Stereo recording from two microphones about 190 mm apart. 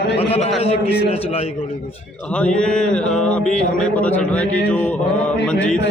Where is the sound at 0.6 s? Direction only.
30° left (ahead or behind).